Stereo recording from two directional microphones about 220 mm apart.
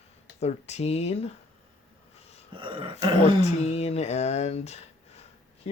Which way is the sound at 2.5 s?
20° right (ahead or behind).